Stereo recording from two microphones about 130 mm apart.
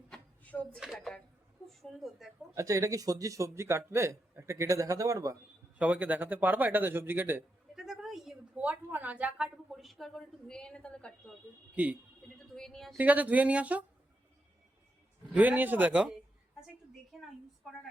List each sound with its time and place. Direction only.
0.1 s a sound: 10° left (ahead or behind)
0.8 s speech: centre (ahead or behind)
2.6 s a man's voice: 25° right (ahead or behind)
5.7 s speech: 10° right (ahead or behind)
7.8 s a woman's voice: centre (ahead or behind)
11.7 s speech: 10° right (ahead or behind)
12.5 s speech: 5° left (ahead or behind)
13.0 s speech: 10° right (ahead or behind)
15.3 s speech: 10° right (ahead or behind)